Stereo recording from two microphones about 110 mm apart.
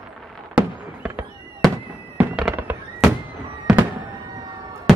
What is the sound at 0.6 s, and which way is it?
Fireworks, 15° right (ahead or behind).